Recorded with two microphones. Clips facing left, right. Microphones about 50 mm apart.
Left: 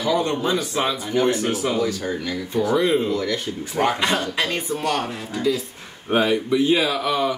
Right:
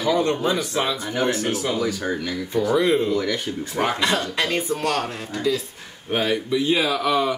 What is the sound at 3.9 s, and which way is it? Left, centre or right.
Speech, left.